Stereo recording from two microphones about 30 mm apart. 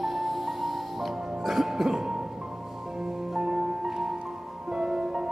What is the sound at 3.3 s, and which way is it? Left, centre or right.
Music, centre.